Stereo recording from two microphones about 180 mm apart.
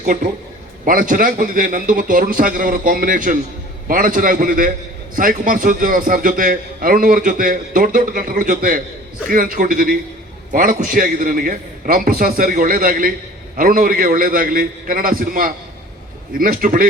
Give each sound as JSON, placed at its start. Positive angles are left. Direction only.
{"t": 0.0, "sound": "a man's voice", "side_deg": -45}